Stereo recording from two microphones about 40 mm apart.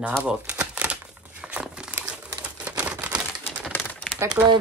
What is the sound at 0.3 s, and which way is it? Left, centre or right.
Crumpling, right.